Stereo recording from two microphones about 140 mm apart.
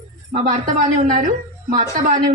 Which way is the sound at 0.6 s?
70° right (ahead or behind).